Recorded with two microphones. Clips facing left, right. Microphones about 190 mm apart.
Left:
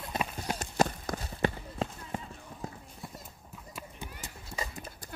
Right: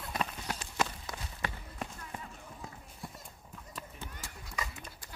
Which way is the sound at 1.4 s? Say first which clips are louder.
Left 10 dB; 30° left (ahead or behind).